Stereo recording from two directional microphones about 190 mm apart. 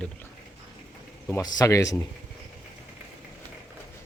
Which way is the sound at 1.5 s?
15° left (ahead or behind).